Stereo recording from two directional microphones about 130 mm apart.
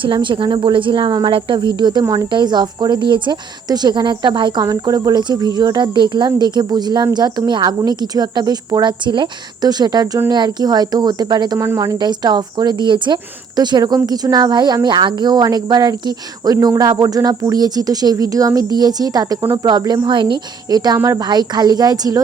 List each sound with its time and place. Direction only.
0.0 s speech: 40° right (ahead or behind)
11.5 s speech: 20° right (ahead or behind)